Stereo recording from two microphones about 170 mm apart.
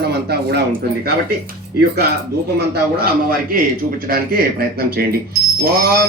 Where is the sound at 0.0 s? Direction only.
70° right (ahead or behind).